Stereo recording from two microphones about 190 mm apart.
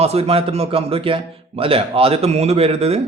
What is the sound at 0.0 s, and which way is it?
A man's voice, 30° right (ahead or behind).